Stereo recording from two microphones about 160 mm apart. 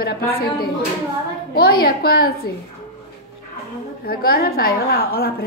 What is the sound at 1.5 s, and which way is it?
Speech, 75° left (ahead or behind).